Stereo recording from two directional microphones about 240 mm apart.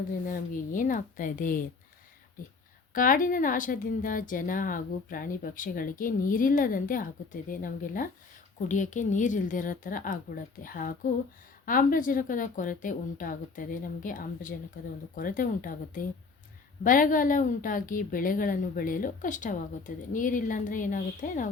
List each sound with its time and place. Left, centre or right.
0.3 s a woman's voice: left
2.9 s a woman's voice: left